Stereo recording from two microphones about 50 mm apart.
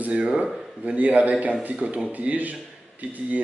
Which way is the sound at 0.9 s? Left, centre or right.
Right.